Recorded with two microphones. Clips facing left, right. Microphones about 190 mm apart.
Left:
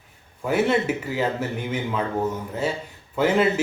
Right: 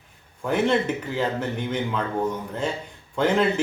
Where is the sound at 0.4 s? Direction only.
5° left (ahead or behind).